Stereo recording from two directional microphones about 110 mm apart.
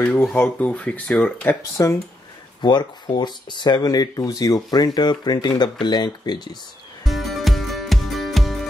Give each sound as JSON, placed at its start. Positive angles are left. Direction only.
{"t": 0.4, "sound": "speech", "side_deg": 15}
{"t": 1.6, "sound": "speech", "side_deg": 25}
{"t": 2.6, "sound": "speech", "side_deg": 40}
{"t": 7.1, "sound": "music", "side_deg": 0}